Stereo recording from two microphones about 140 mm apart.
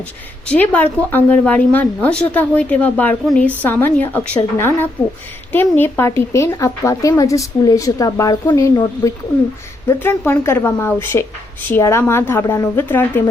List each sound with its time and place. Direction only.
0.4 s a woman's voice: 10° left (ahead or behind)